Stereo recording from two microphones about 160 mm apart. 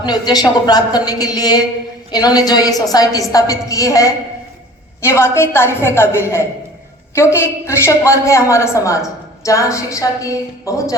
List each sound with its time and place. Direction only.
0.0 s a woman's voice: 25° left (ahead or behind)